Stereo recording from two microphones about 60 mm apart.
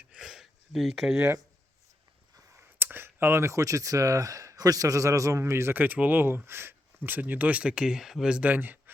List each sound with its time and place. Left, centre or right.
0.2 s a sound: centre
2.7 s speech: right
5.7 s speech: right; by 8.4 s centre
8.4 s speech: right